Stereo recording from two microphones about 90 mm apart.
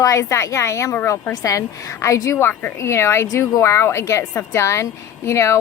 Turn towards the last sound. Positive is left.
turn(degrees=30)  # may be behind; listen again after turning